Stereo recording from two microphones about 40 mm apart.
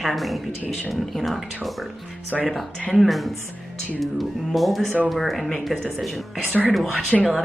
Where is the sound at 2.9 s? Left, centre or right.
Centre.